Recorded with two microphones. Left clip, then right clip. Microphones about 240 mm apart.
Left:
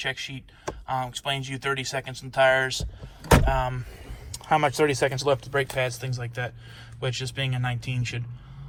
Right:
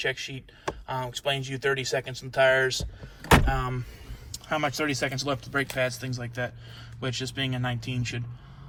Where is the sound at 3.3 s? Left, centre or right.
Centre.